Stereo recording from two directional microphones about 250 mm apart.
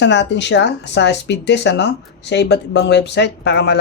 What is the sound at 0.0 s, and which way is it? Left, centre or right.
Speech, left.